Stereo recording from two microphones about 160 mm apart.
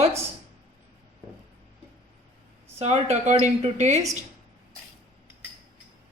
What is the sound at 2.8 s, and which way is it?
A woman's voice, 45° right (ahead or behind).